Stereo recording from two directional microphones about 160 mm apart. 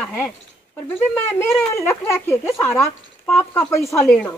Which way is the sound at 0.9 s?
15° left (ahead or behind).